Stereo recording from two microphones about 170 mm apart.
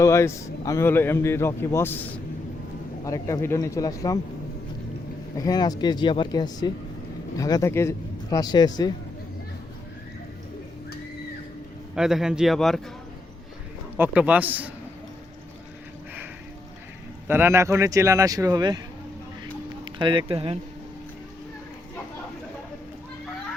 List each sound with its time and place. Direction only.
0.0 s a man's voice: 15° left (ahead or behind)
5.5 s speech: 20° left (ahead or behind)
11.9 s speech: 5° right (ahead or behind)
13.9 s a man's voice: 10° right (ahead or behind)
17.2 s speech: 10° right (ahead or behind)
19.8 s speech: 30° right (ahead or behind)